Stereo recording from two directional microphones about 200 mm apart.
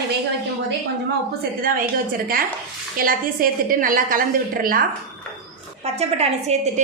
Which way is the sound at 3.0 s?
45° right (ahead or behind).